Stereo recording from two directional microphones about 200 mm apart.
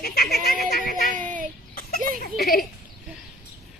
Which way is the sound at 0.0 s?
50° left (ahead or behind).